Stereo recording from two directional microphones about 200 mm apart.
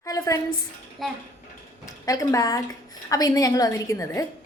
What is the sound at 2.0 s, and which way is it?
A woman's voice, 15° left (ahead or behind).